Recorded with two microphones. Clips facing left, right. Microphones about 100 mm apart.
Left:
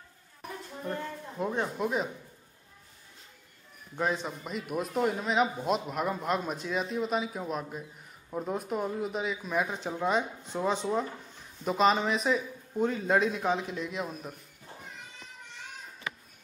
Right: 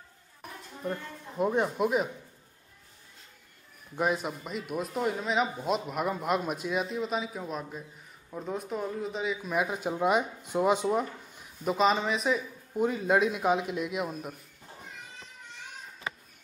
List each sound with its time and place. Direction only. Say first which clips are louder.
1.4 s speech: right 4 dB; 15° right (ahead or behind)
3.9 s a man's voice: right 2 dB; 10° right (ahead or behind)
8.3 s speech: left 3 dB; 15° left (ahead or behind)
8.5 s speech: even; 5° left (ahead or behind); by 11.7 s 10° right (ahead or behind)
11.7 s a man's voice: left 1 dB; centre (ahead or behind)